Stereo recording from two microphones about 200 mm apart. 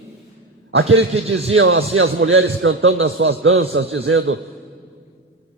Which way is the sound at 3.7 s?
65° right (ahead or behind).